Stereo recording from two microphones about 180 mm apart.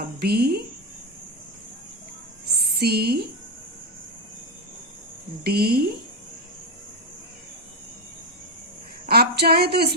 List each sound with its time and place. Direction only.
0.0 s speech: 60° right (ahead or behind)
2.8 s speech: 60° right (ahead or behind)
5.5 s speech: 60° right (ahead or behind)
9.0 s speech: 60° right (ahead or behind)